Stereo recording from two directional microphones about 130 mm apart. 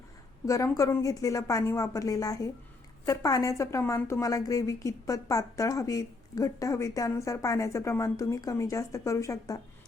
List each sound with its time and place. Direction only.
0.4 s a woman's voice: 25° left (ahead or behind)